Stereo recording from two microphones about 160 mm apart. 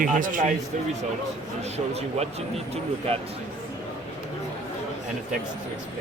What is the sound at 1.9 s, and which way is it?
Speech, 40° right (ahead or behind).